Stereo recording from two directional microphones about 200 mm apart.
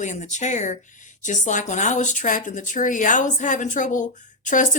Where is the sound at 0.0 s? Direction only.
35° left (ahead or behind).